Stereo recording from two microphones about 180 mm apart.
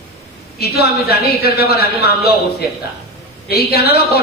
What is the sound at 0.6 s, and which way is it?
A woman's voice, 60° left (ahead or behind).